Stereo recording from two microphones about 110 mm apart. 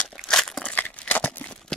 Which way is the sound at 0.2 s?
5° left (ahead or behind).